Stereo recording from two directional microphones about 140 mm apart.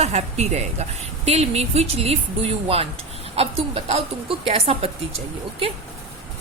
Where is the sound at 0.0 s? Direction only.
50° right (ahead or behind).